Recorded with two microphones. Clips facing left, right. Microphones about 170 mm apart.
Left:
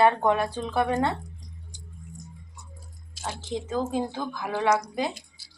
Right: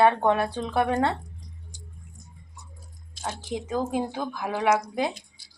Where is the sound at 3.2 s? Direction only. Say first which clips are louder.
Even; 15° right (ahead or behind).